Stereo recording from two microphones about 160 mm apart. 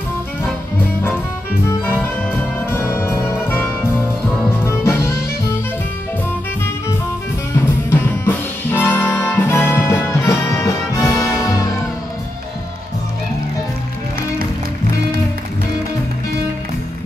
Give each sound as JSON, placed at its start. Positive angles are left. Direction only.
{"t": 1.0, "sound": "music", "side_deg": 15}
{"t": 7.5, "sound": "music", "side_deg": 15}